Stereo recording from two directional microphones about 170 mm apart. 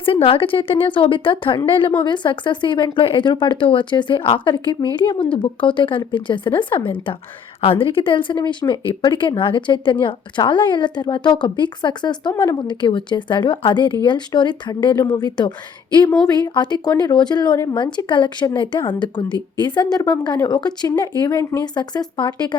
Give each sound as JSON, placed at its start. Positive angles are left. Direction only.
{"t": 0.0, "sound": "a woman's voice", "side_deg": 35}